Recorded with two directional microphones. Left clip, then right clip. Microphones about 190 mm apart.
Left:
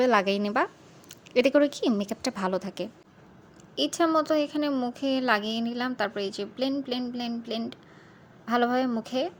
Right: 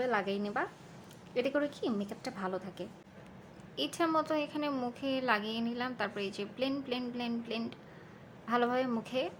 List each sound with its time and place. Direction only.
0.0 s a woman's voice: 55° left (ahead or behind)
3.8 s a woman's voice: 30° left (ahead or behind)